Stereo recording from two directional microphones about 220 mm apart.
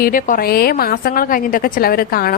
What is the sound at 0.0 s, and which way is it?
A woman's voice, 40° left (ahead or behind).